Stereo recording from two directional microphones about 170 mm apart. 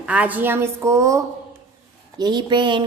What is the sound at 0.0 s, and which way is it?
A woman's voice, 10° right (ahead or behind).